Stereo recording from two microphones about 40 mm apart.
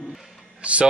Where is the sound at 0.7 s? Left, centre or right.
Right.